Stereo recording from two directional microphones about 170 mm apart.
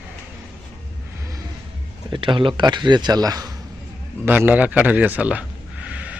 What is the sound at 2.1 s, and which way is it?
Speech, 30° right (ahead or behind).